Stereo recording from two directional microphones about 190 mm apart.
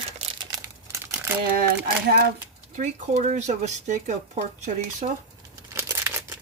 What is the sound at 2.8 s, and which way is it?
Speech, 40° right (ahead or behind).